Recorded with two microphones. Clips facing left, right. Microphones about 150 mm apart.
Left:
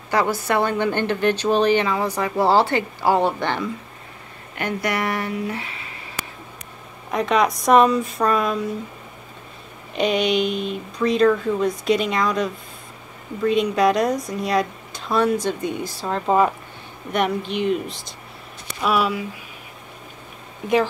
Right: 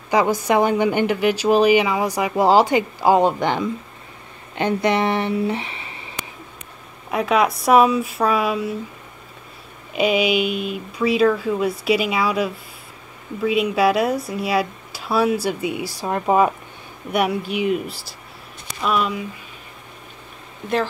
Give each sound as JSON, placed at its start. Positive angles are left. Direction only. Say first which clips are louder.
{"t": 0.1, "sound": "a woman's voice", "louder": "right 3 dB", "side_deg": -15}
{"t": 7.1, "sound": "speech", "louder": "right 1 dB", "side_deg": -5}
{"t": 9.9, "sound": "a woman's voice", "louder": "right 1 dB", "side_deg": -5}